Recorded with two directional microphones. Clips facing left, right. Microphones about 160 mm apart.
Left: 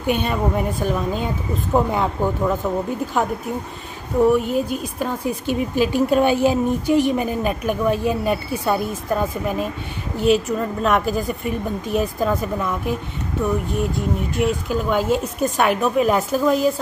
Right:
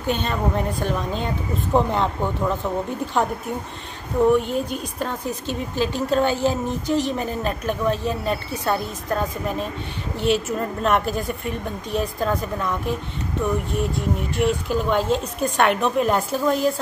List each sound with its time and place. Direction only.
0.0 s speech: 10° left (ahead or behind)
4.3 s a woman's voice: 5° left (ahead or behind)
13.9 s a woman's voice: centre (ahead or behind)